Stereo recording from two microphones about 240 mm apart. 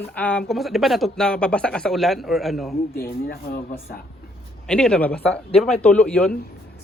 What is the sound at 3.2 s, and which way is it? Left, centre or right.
Speech, left.